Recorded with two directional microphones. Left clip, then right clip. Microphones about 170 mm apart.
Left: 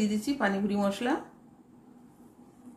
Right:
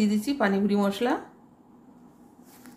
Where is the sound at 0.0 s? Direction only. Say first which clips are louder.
Right 3 dB; 35° right (ahead or behind).